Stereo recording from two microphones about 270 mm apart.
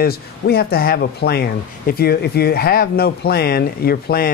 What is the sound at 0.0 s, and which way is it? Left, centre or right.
Speech, left.